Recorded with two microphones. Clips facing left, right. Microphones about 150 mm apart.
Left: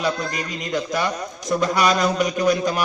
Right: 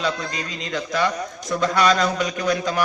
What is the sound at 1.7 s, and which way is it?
Speech, 15° left (ahead or behind).